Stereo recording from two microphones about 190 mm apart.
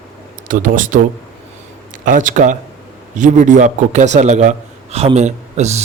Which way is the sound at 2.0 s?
45° right (ahead or behind).